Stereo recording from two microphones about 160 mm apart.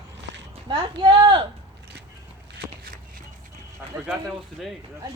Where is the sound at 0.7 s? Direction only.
30° right (ahead or behind).